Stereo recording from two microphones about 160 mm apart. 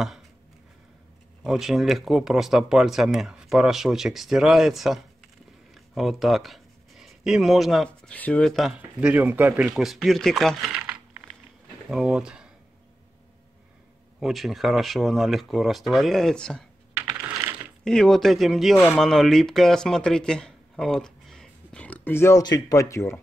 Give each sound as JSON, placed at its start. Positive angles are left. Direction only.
{"t": 1.4, "sound": "speech", "side_deg": 0}
{"t": 14.2, "sound": "speech", "side_deg": 0}
{"t": 16.9, "sound": "typing", "side_deg": -10}
{"t": 17.8, "sound": "speech", "side_deg": 5}